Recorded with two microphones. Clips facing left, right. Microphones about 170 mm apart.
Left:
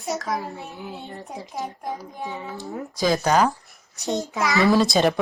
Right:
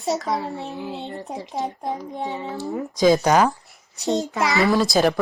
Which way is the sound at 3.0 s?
15° right (ahead or behind).